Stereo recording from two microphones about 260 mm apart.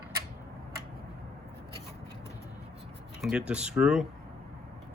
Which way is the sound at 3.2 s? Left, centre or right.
Centre.